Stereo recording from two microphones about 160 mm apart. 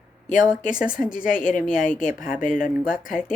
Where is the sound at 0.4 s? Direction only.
5° right (ahead or behind).